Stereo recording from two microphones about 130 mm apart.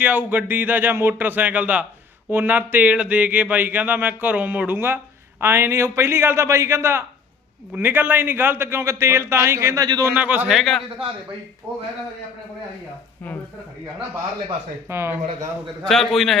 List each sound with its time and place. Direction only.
0.0 s a man's voice: 15° right (ahead or behind); by 10.1 s 30° right (ahead or behind)
10.1 s speech: 15° right (ahead or behind)
10.6 s a man's voice: centre (ahead or behind)
14.8 s a man's voice: 20° right (ahead or behind)
15.8 s a man's voice: 5° left (ahead or behind)